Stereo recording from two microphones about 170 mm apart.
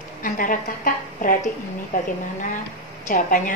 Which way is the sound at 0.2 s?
55° left (ahead or behind).